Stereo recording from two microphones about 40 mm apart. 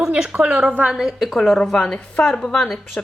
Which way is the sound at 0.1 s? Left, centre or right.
Right.